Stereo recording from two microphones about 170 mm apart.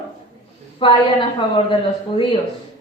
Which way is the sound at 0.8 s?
30° left (ahead or behind).